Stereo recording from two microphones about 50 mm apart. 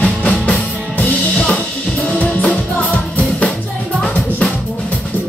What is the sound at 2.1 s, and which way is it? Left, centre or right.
Music, left.